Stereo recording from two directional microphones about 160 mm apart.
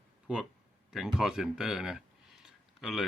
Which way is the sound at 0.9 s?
5° right (ahead or behind).